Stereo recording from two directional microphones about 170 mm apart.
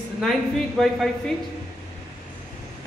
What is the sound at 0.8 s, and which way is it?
Speech, centre (ahead or behind).